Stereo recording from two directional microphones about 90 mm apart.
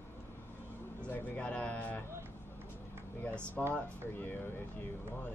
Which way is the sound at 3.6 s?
10° left (ahead or behind).